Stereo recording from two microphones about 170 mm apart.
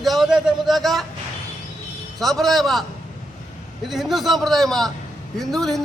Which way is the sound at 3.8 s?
Centre (ahead or behind).